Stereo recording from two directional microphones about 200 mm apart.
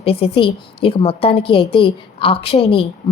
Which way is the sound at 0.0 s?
30° left (ahead or behind).